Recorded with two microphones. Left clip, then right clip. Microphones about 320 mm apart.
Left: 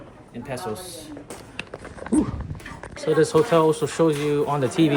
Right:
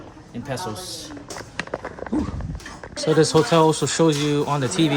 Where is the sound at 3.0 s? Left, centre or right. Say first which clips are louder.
Right 1 dB; centre.